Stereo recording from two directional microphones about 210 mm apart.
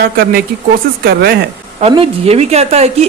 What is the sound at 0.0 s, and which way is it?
Speech, 45° right (ahead or behind).